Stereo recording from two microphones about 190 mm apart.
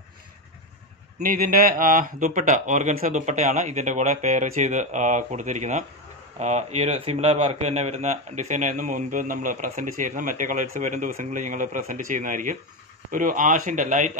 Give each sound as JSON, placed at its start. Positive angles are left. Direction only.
{"t": 1.2, "sound": "a man's voice", "side_deg": -45}